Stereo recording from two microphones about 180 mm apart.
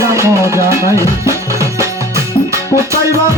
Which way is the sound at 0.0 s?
15° right (ahead or behind).